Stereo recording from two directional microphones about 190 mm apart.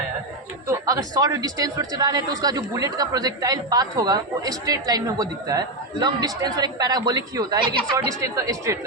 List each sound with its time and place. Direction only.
0.7 s speech: 20° right (ahead or behind)